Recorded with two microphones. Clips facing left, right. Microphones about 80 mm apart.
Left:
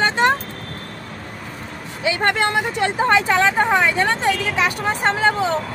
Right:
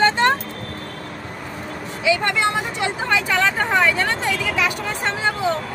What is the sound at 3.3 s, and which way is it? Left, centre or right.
Speech, left.